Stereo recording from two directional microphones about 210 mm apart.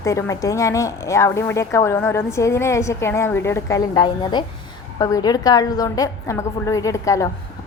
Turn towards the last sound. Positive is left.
turn(degrees=15)  # may be behind; listen again after turning